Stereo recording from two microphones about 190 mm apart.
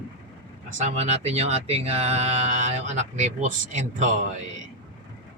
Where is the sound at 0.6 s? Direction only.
40° right (ahead or behind).